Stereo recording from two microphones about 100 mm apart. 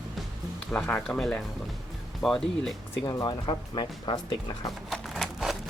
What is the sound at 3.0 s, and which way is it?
Speech, 50° left (ahead or behind).